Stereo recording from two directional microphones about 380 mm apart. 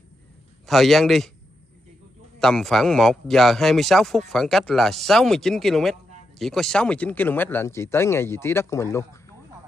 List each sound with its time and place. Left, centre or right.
0.7 s speech: centre
2.4 s speech: centre